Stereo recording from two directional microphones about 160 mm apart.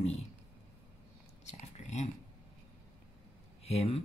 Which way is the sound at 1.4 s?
45° left (ahead or behind).